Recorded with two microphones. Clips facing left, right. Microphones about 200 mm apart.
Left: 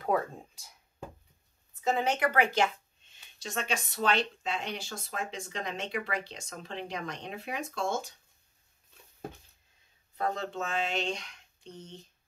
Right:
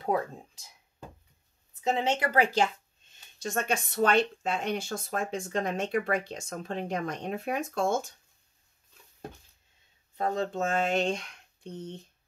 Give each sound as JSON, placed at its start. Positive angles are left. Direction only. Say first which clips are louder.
{"t": 1.8, "sound": "speech", "louder": "right 1 dB", "side_deg": -25}
{"t": 3.4, "sound": "speech", "louder": "right 4 dB", "side_deg": -50}
{"t": 10.1, "sound": "speech", "louder": "right 3 dB", "side_deg": -35}